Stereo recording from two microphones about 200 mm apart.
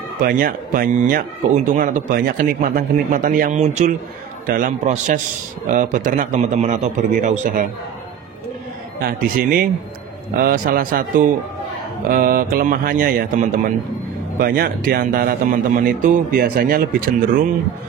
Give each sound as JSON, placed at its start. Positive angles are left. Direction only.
{"t": 0.2, "sound": "a man's voice", "side_deg": -45}
{"t": 9.0, "sound": "speech", "side_deg": -45}